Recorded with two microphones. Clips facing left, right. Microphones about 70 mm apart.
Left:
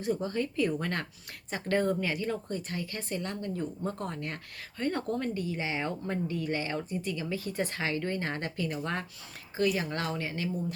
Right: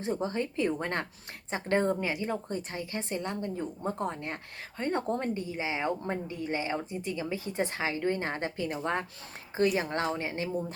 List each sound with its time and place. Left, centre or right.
0.0 s a woman's voice: right